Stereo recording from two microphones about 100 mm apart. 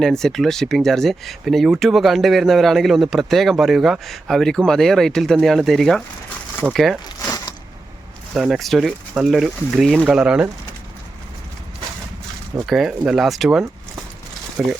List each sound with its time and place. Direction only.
0.0 s speech: 5° left (ahead or behind)
7.3 s a sound: 35° left (ahead or behind)
8.4 s speech: centre (ahead or behind)
10.1 s speech: 10° right (ahead or behind)
12.6 s speech: 5° right (ahead or behind)